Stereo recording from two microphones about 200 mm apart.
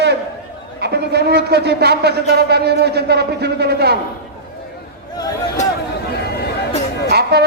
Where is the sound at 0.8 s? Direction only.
55° right (ahead or behind).